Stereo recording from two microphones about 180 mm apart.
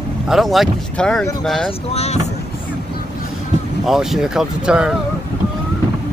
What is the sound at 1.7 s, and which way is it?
Speech, 35° left (ahead or behind).